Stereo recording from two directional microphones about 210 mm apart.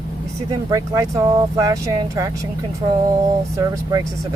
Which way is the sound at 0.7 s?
15° right (ahead or behind).